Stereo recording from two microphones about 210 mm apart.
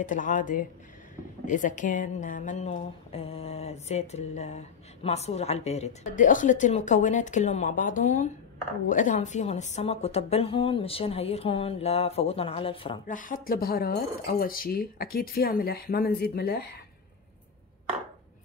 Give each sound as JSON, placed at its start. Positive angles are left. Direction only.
{"t": 0.0, "sound": "a woman's voice", "side_deg": 40}
{"t": 13.0, "sound": "speech", "side_deg": 40}